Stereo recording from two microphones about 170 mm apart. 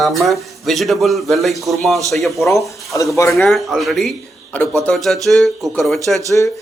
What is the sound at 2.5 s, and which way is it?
Speech, 20° left (ahead or behind).